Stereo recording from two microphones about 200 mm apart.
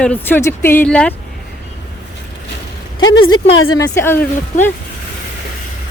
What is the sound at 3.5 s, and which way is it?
Speech, 90° left.